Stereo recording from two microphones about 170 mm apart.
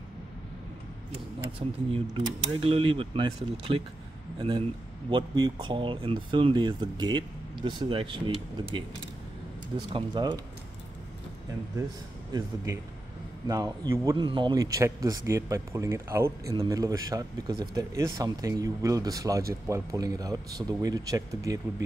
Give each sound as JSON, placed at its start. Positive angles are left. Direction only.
{"t": 1.9, "sound": "speech", "side_deg": -35}
{"t": 9.9, "sound": "speech", "side_deg": -25}
{"t": 12.3, "sound": "speech", "side_deg": -25}
{"t": 14.1, "sound": "speech", "side_deg": -30}